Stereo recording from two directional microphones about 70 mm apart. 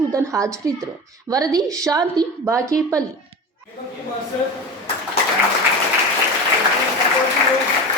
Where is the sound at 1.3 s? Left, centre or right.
Right.